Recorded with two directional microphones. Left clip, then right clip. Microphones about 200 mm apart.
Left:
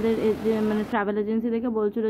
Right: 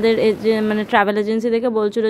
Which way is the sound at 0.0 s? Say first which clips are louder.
Right 8 dB; 35° right (ahead or behind).